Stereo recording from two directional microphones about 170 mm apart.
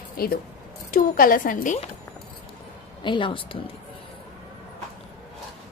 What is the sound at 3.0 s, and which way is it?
Speech, 30° left (ahead or behind).